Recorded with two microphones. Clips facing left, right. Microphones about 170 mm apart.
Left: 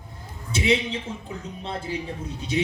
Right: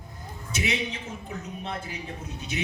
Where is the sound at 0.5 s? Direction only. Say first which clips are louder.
Left 7 dB; 30° left (ahead or behind).